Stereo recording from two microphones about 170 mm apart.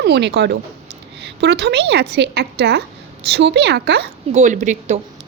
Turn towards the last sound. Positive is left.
turn(degrees=-45)  # may be behind; listen again after turning